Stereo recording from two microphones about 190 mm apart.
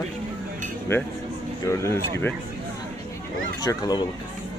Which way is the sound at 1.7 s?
15° left (ahead or behind).